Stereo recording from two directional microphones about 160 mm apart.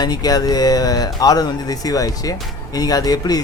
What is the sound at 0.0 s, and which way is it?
Speech, 25° left (ahead or behind).